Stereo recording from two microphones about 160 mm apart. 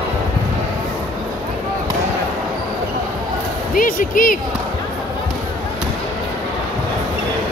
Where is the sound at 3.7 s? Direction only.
60° left (ahead or behind).